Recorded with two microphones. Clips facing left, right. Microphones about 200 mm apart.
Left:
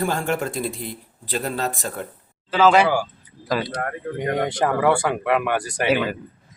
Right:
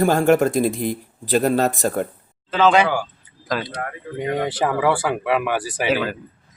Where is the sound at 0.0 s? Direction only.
40° right (ahead or behind).